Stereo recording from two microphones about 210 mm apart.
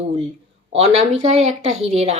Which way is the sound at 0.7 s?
30° right (ahead or behind).